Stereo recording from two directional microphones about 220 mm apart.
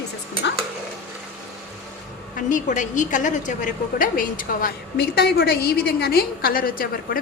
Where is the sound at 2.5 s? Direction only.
35° left (ahead or behind).